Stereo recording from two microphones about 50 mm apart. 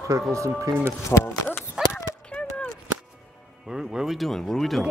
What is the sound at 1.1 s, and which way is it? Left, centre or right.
Speech, left.